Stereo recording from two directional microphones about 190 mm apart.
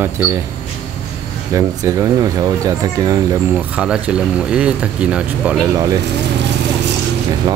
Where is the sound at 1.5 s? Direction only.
15° right (ahead or behind).